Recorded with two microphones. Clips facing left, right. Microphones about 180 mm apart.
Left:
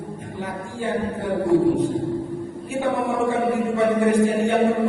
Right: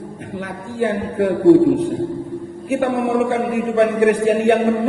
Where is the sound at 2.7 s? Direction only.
75° right (ahead or behind).